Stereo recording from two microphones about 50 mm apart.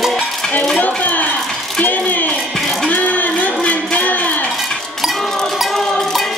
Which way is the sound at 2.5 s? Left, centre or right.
Centre.